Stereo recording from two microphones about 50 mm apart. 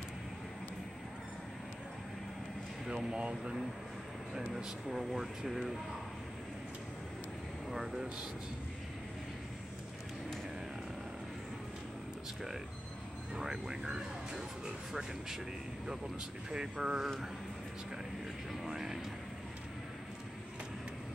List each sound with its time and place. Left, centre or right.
2.9 s speech: centre
4.5 s speech: centre
7.7 s speech: centre
13.4 s speech: centre
16.4 s speech: centre
18.6 s vehicle: centre